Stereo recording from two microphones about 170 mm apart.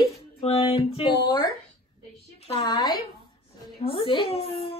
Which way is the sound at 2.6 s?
25° left (ahead or behind).